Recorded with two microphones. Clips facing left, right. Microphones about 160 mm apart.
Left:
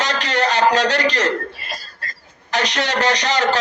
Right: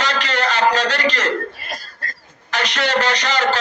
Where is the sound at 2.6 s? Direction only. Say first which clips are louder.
Right 1 dB; 55° right (ahead or behind).